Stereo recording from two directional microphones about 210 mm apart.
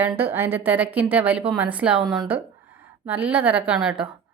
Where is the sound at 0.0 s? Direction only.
10° right (ahead or behind).